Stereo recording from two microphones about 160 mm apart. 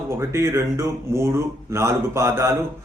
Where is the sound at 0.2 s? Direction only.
15° right (ahead or behind).